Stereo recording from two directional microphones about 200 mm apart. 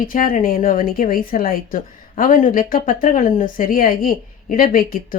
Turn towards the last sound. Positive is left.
turn(degrees=45)  # may be behind; listen again after turning